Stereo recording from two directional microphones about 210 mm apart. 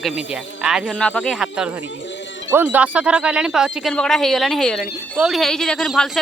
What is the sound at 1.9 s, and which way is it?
Music, 60° left (ahead or behind).